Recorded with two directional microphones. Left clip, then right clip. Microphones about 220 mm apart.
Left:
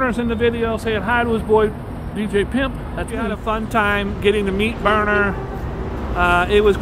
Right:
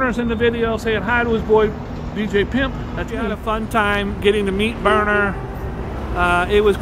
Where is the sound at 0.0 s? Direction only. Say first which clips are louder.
Even; 5° left (ahead or behind).